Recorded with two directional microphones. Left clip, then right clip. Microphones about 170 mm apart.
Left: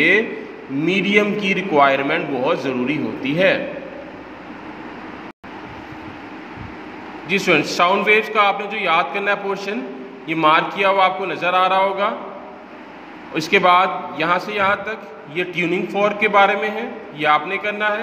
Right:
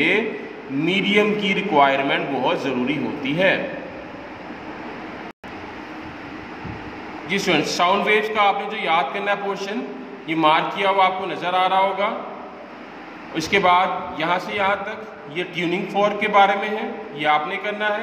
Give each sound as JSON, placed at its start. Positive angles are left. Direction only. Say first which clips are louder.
{"t": 0.8, "sound": "a man's voice", "louder": "left 2 dB", "side_deg": 15}
{"t": 7.2, "sound": "a man's voice", "louder": "left 3 dB", "side_deg": 20}
{"t": 13.3, "sound": "a man's voice", "louder": "left 3 dB", "side_deg": 20}